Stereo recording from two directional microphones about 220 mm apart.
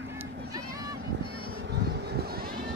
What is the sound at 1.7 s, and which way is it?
Vehicle, 50° right (ahead or behind).